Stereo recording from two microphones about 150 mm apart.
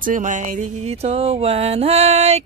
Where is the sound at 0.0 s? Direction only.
60° right (ahead or behind).